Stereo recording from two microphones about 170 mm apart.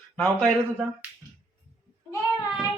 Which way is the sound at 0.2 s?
Centre (ahead or behind).